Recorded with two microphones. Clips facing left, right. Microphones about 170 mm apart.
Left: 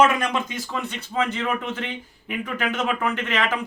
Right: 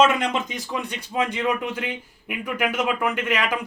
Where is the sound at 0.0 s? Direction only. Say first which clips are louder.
Even; 25° right (ahead or behind).